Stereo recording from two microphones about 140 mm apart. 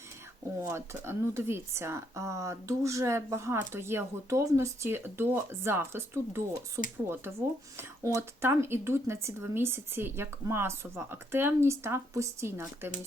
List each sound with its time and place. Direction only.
0.6 s speech: 20° right (ahead or behind)